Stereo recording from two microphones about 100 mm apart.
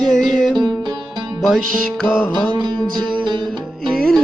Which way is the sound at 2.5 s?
50° right (ahead or behind).